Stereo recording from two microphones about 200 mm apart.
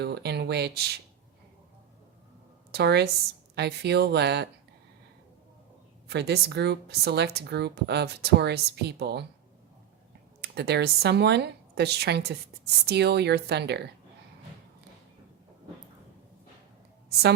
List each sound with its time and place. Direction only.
0.0 s speech: 55° right (ahead or behind)
2.7 s speech: 55° right (ahead or behind)
6.1 s speech: 55° right (ahead or behind)
10.4 s speech: 55° right (ahead or behind)